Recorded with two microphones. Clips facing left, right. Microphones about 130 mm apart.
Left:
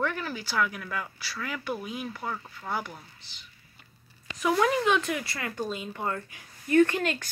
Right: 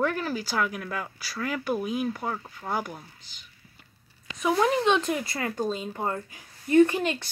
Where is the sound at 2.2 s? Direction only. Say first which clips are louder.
Right 3 dB; 20° right (ahead or behind).